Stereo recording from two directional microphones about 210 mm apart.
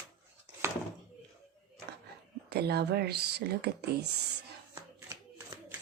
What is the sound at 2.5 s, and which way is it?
Speech, 50° right (ahead or behind).